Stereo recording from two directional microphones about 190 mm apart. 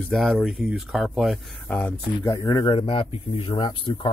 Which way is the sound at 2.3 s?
15° left (ahead or behind).